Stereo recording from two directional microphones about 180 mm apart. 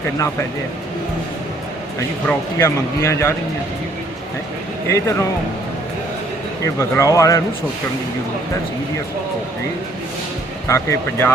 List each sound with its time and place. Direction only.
2.2 s speech: 15° left (ahead or behind)
4.9 s speech: 15° left (ahead or behind)
6.7 s speech: 15° left (ahead or behind)
10.7 s speech: 15° left (ahead or behind)